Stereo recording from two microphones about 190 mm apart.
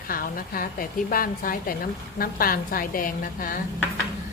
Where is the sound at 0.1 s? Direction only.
50° left (ahead or behind).